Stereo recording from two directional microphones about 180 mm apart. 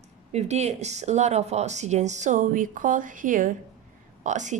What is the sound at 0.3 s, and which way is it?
A woman's voice, 35° right (ahead or behind).